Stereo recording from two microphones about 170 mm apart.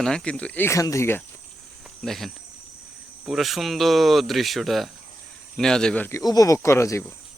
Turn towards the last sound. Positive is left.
turn(degrees=15)  # may be behind; listen again after turning